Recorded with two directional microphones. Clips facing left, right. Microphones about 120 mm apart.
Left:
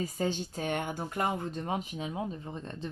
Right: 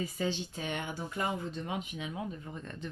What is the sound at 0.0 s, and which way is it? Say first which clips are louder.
Speech: left 2 dB; 45° left (ahead or behind).